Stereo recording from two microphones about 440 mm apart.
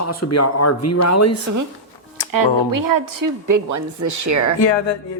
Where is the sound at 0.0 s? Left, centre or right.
Left.